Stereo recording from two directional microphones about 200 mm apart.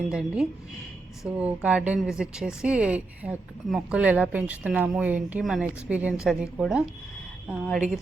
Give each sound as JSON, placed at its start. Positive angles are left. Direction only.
{"t": 0.1, "sound": "a woman's voice", "side_deg": -5}